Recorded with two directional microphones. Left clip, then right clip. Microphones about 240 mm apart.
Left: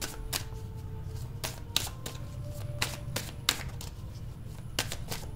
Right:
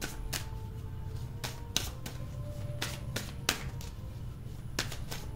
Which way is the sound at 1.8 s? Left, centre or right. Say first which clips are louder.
Left 3 dB; centre.